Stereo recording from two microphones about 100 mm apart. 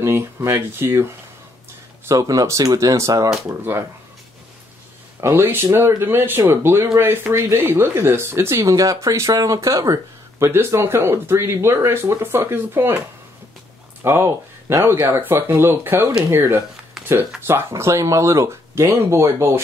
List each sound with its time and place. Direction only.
0.0 s speech: 25° right (ahead or behind)
2.0 s speech: 35° right (ahead or behind)
5.2 s speech: 25° right (ahead or behind)
14.0 s speech: 25° right (ahead or behind)